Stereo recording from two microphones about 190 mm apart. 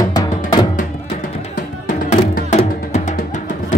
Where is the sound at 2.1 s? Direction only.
40° left (ahead or behind).